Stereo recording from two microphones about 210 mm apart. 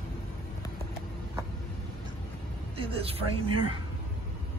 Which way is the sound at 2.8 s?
25° right (ahead or behind).